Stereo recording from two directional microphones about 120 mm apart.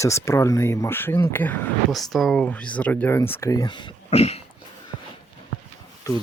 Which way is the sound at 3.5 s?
35° left (ahead or behind).